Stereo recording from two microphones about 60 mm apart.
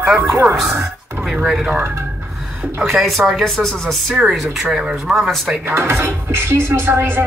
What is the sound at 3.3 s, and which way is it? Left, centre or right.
Speech, centre.